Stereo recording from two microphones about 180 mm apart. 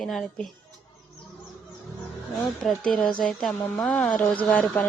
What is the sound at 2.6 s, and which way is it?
Speech, centre (ahead or behind).